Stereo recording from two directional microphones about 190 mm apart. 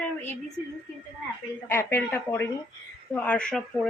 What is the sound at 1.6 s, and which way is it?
Speech, 15° left (ahead or behind).